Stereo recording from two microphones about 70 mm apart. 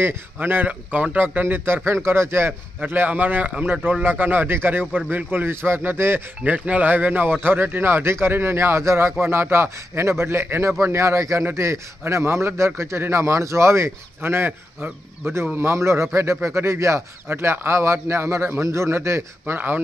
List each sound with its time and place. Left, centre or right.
0.0 s a man's voice: right
2.8 s a man's voice: right
4.0 s a man's voice: right
6.4 s a man's voice: right
15.5 s a man's voice: right